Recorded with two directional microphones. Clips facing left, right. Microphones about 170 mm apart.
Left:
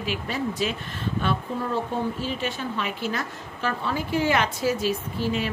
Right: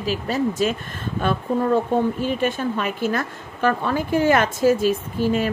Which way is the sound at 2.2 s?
50° right (ahead or behind).